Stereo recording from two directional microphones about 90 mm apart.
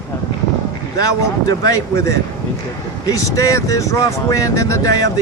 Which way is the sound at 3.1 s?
40° left (ahead or behind).